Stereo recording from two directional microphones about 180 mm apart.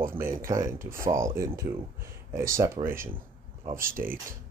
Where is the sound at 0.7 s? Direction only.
15° right (ahead or behind).